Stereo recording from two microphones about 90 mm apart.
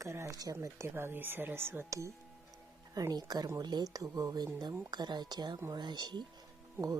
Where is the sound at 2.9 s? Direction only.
45° right (ahead or behind).